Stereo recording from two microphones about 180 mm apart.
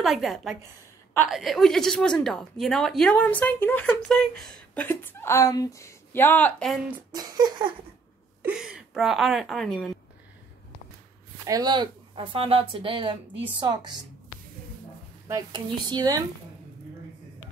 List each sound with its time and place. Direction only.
0.0 s a woman's voice: centre (ahead or behind)
7.1 s speech: 20° right (ahead or behind)
8.4 s a woman's voice: 5° right (ahead or behind)
11.4 s speech: 20° right (ahead or behind)
15.2 s speech: 20° right (ahead or behind)